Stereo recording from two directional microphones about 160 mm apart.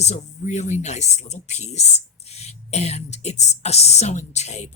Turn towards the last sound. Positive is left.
turn(degrees=45)  # may be behind; listen again after turning